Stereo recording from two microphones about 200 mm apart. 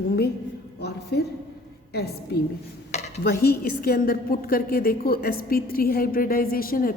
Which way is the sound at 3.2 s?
50° left (ahead or behind).